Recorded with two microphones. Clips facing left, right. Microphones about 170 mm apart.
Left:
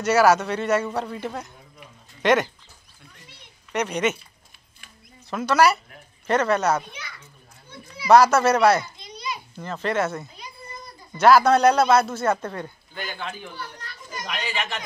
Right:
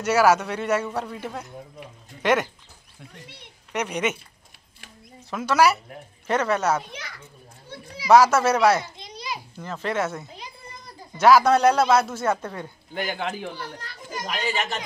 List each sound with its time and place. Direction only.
0.0 s speech: 10° right (ahead or behind)
3.7 s speech: 10° right (ahead or behind)
5.3 s speech: 10° right (ahead or behind)
6.9 s a child's voice: 65° right (ahead or behind)
8.1 s speech: 10° right (ahead or behind)
8.9 s a sound: 90° right
9.6 s speech: 5° right (ahead or behind)
12.9 s speech: 70° right (ahead or behind)
13.7 s a child's voice: 40° right (ahead or behind)